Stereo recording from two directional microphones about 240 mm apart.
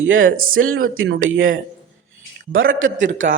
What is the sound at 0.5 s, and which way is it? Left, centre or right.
A man's voice, right.